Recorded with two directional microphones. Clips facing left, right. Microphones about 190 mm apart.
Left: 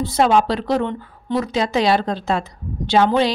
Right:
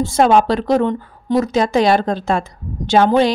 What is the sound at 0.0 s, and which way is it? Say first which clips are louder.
A woman's voice: right 3 dB; 50° right (ahead or behind).